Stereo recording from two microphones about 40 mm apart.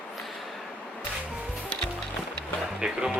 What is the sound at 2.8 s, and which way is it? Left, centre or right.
Speech, centre.